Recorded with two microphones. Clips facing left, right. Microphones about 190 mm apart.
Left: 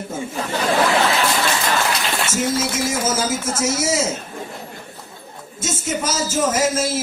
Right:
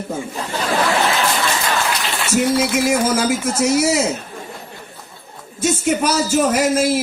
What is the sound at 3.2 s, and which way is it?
Speech, 65° right (ahead or behind).